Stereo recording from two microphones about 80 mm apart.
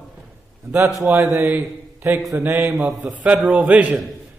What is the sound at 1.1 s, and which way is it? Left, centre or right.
Speech, centre.